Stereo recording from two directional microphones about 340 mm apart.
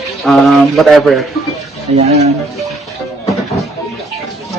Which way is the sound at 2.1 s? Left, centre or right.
Centre.